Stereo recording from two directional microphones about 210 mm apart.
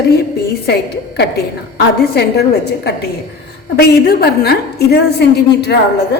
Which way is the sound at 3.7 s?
50° left (ahead or behind).